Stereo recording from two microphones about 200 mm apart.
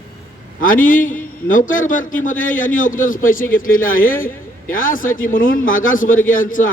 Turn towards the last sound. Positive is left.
turn(degrees=40)  # may be behind; listen again after turning